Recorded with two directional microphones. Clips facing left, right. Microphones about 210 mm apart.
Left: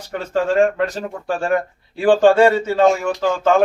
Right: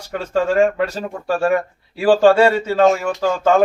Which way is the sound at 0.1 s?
10° right (ahead or behind).